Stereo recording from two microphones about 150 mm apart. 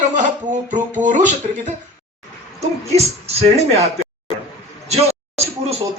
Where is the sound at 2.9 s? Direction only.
45° right (ahead or behind).